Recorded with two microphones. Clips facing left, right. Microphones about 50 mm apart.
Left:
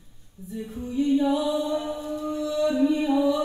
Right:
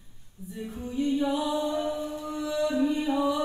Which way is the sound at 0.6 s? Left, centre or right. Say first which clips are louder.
Left 4 dB; centre.